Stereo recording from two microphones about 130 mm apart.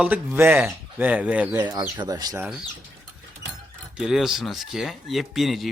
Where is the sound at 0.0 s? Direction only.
15° right (ahead or behind).